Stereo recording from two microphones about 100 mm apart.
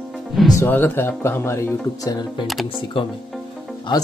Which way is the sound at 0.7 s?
20° left (ahead or behind).